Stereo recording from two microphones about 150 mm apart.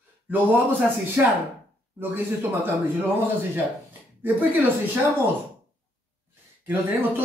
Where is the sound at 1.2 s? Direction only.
15° right (ahead or behind).